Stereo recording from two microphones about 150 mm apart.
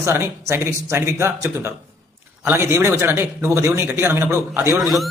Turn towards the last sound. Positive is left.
turn(degrees=0)  # may be behind; listen again after turning